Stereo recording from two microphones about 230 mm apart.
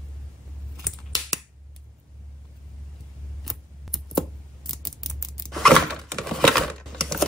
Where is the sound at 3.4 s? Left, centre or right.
Centre.